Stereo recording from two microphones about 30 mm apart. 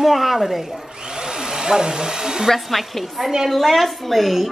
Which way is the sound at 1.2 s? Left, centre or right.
Right.